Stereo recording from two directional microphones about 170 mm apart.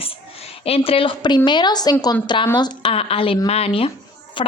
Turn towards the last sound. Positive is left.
turn(degrees=30)  # may be behind; listen again after turning